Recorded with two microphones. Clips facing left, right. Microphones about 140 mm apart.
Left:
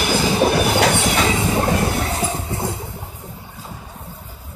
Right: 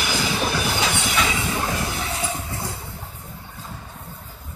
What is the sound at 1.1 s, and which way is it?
Train, 40° left (ahead or behind).